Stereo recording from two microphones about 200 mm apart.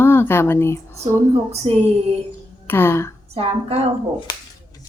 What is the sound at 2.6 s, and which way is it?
Speech, 10° left (ahead or behind).